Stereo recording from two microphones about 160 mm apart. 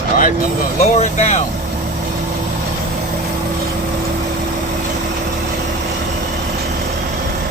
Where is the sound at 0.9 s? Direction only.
45° left (ahead or behind).